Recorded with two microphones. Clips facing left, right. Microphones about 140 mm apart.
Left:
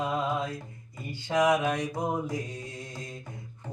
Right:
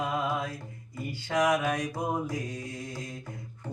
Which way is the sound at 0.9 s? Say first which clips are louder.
Left 1 dB; 20° left (ahead or behind).